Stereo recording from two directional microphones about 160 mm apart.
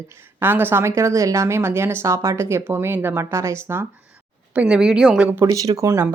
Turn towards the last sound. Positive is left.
turn(degrees=-20)  # may be behind; listen again after turning